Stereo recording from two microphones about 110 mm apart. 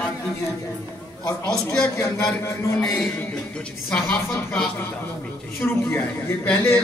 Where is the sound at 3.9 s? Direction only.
20° left (ahead or behind).